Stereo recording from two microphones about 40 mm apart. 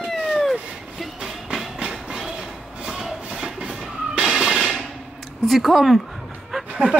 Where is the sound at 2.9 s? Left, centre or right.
Centre.